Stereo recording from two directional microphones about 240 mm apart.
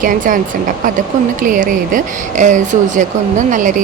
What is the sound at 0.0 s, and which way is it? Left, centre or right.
Speech, right.